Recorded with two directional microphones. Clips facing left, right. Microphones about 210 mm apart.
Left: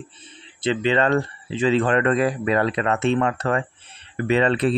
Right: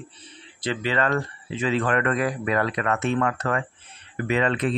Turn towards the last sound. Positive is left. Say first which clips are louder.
# left 4 dB
turn(degrees=30)  # may be behind; listen again after turning